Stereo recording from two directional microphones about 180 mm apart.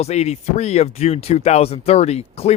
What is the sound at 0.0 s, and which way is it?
Speech, 35° left (ahead or behind).